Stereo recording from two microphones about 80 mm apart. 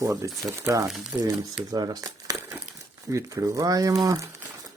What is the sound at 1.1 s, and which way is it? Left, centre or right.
Speech, centre.